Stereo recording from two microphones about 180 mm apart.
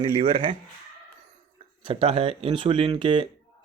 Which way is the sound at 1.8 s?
30° right (ahead or behind).